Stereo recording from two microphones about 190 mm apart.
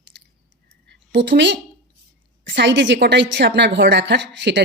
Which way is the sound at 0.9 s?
65° right (ahead or behind).